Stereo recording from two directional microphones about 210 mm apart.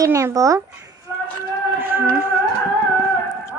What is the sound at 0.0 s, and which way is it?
Speech, 15° right (ahead or behind).